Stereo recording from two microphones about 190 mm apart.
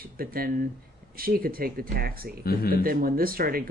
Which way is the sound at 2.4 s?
50° left (ahead or behind).